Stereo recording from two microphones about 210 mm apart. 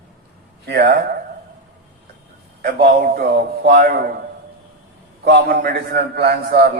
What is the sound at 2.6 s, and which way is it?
A man's voice, 45° right (ahead or behind).